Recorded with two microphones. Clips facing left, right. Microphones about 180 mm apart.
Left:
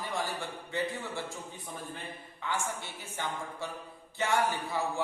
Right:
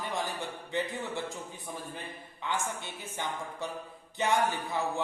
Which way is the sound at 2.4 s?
20° right (ahead or behind).